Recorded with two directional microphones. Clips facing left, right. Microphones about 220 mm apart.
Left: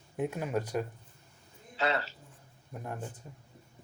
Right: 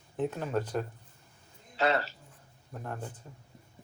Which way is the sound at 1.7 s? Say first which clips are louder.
Right 3 dB; 45° right (ahead or behind).